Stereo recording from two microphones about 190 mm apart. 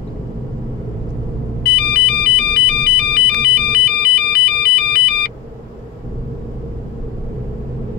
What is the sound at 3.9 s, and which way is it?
Ringtone, 55° left (ahead or behind).